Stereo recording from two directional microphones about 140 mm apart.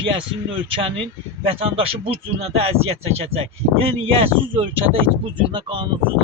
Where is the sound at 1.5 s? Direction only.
40° right (ahead or behind).